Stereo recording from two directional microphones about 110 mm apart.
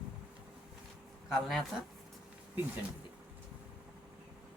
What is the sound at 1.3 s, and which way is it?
Speech, 5° right (ahead or behind).